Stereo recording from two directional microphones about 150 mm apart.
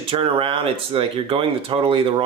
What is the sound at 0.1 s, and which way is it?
Speech, 35° right (ahead or behind).